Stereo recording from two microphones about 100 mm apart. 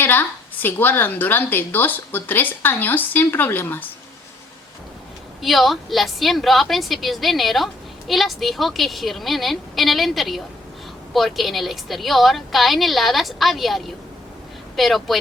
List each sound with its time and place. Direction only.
0.0 s a woman's voice: 20° left (ahead or behind)
5.4 s a woman's voice: centre (ahead or behind)